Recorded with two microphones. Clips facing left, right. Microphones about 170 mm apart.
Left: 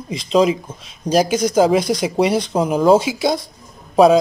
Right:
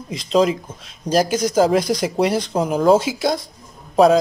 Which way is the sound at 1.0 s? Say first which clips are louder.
Left 2 dB; 5° right (ahead or behind).